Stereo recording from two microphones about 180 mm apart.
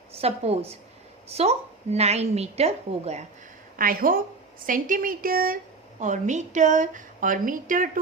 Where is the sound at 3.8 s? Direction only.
50° right (ahead or behind).